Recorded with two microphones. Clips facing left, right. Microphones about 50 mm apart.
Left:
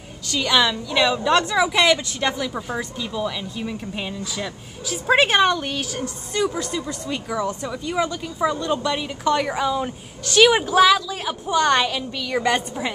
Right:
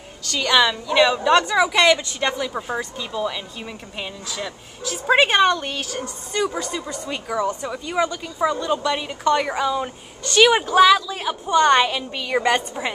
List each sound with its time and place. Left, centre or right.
0.3 s a woman's voice: centre